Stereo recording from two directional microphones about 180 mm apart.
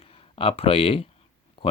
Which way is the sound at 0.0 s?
30° left (ahead or behind).